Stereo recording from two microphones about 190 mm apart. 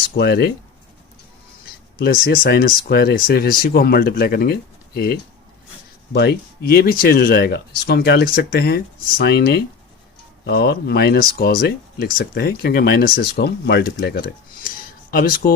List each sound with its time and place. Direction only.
0.2 s speech: 60° left (ahead or behind)
2.0 s speech: 50° left (ahead or behind)
6.1 s speech: 55° left (ahead or behind)